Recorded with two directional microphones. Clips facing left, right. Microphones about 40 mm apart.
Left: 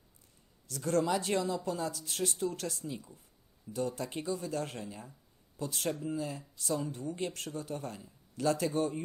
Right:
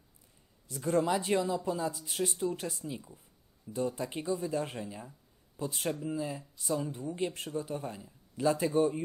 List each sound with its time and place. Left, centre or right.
0.7 s speech: centre